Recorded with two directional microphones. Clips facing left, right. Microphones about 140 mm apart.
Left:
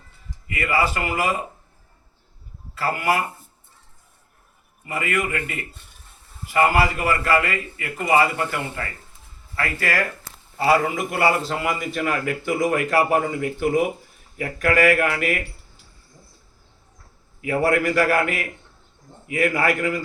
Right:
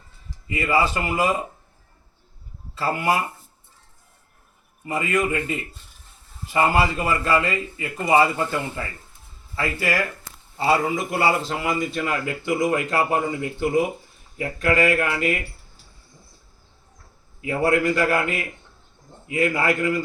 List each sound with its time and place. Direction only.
0.4 s a man's voice: 25° right (ahead or behind)
2.7 s a man's voice: 20° right (ahead or behind)
4.9 s a man's voice: 20° right (ahead or behind)
10.6 s a man's voice: 25° right (ahead or behind)
17.4 s a man's voice: 25° right (ahead or behind)